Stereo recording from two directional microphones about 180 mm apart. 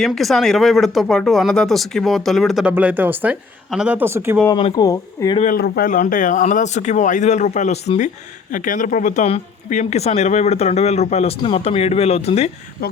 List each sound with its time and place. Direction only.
0.0 s speech: centre (ahead or behind)
4.4 s speech: 25° left (ahead or behind)
5.5 s speech: 60° left (ahead or behind); by 12.5 s 35° left (ahead or behind)
12.8 s speech: 60° left (ahead or behind)